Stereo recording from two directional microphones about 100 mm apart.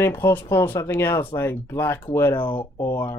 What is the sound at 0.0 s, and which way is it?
Speech, 25° left (ahead or behind).